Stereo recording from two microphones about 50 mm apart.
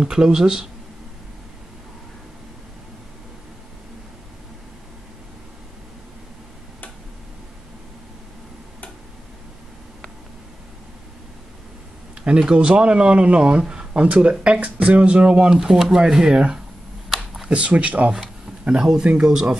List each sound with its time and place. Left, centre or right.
0.0 s speech: centre
12.3 s speech: centre
17.1 s a sound: centre
17.5 s speech: right
18.6 s speech: centre